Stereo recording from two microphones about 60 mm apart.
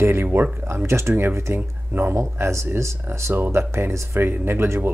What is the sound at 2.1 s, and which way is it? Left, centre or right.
Speech, right.